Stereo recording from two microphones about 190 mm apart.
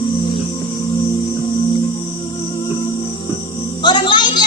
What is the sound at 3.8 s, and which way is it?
Music, 25° left (ahead or behind).